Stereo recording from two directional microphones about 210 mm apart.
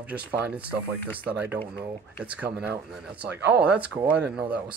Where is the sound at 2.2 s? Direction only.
5° right (ahead or behind).